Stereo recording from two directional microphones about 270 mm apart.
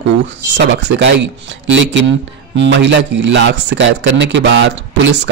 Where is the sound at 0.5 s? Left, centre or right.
Right.